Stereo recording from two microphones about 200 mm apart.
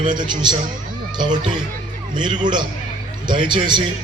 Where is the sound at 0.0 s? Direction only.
20° right (ahead or behind).